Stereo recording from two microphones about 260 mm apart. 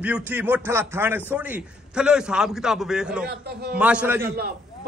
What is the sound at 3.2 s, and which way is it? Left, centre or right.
Speech, right.